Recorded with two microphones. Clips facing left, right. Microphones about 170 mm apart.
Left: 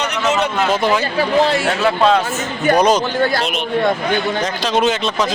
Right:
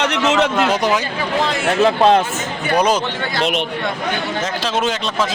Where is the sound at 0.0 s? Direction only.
90° right.